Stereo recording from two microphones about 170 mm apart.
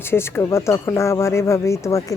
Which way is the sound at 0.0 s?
15° left (ahead or behind).